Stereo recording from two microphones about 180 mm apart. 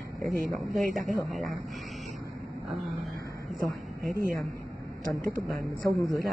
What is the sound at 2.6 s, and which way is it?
Speech, centre (ahead or behind).